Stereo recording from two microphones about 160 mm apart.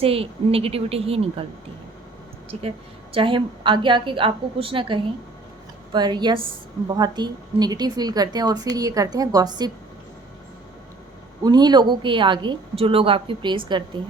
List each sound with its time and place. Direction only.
0.0 s a woman's voice: 35° right (ahead or behind)
2.5 s a woman's voice: 40° right (ahead or behind)
11.4 s a woman's voice: 25° right (ahead or behind)